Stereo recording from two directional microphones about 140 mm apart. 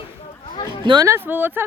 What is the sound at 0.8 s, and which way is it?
Speech, 35° right (ahead or behind).